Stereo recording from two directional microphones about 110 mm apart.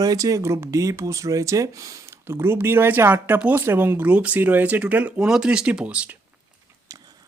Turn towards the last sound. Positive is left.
turn(degrees=-15)  # may be behind; listen again after turning